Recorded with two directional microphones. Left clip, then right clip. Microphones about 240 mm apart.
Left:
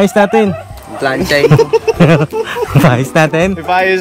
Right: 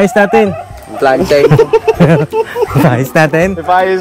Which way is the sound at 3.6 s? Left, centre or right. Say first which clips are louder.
Right 2 dB; left.